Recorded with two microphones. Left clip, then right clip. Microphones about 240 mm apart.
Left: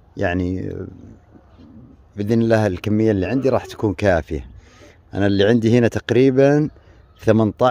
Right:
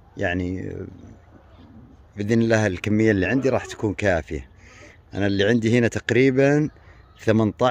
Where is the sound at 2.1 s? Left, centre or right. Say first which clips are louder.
Left 3 dB; centre.